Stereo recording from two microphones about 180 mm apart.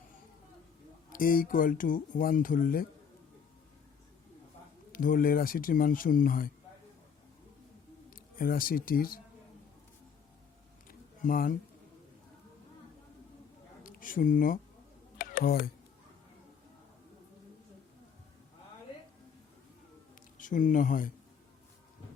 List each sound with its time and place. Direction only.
1.1 s speech: 50° left (ahead or behind)
4.9 s speech: 50° left (ahead or behind)
8.1 s speech: 55° left (ahead or behind)
10.8 s a sound: 50° left (ahead or behind)
13.8 s speech: 50° left (ahead or behind)
15.2 s a sound: 55° left (ahead or behind)
20.4 s speech: 45° left (ahead or behind)